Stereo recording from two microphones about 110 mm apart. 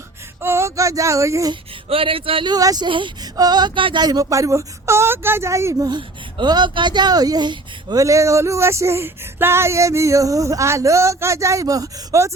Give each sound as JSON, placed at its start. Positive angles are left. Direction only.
{"t": 0.4, "sound": "speech", "side_deg": -25}
{"t": 1.9, "sound": "speech", "side_deg": -55}
{"t": 2.5, "sound": "a woman's voice", "side_deg": -35}
{"t": 5.9, "sound": "speech", "side_deg": -45}